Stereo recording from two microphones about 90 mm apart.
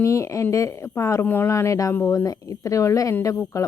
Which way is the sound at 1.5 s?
35° left (ahead or behind).